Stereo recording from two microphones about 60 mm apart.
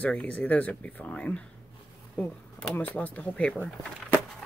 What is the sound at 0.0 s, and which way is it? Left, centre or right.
Speech, left.